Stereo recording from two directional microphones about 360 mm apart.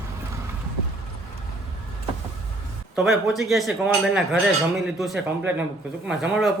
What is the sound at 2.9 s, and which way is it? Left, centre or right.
Speech, centre.